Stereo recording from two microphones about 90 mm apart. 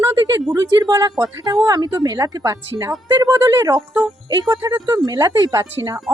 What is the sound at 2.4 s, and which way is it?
Speech, 30° right (ahead or behind).